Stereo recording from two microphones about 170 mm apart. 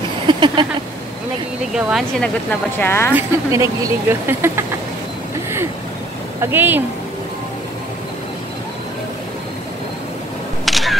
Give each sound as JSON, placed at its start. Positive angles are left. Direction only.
{"t": 0.3, "sound": "a sound", "side_deg": -30}
{"t": 1.7, "sound": "speech", "side_deg": 0}
{"t": 2.8, "sound": "speech", "side_deg": 15}
{"t": 3.2, "sound": "speech", "side_deg": -15}
{"t": 6.4, "sound": "speech", "side_deg": -10}
{"t": 10.6, "sound": "single-lens reflex camera", "side_deg": 0}